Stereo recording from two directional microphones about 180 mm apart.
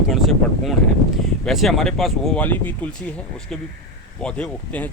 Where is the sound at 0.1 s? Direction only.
Centre (ahead or behind).